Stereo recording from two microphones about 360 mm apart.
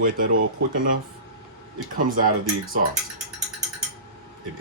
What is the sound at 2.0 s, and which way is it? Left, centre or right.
Speech, right.